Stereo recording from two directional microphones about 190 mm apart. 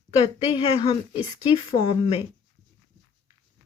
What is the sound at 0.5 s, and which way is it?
Speech, 30° left (ahead or behind).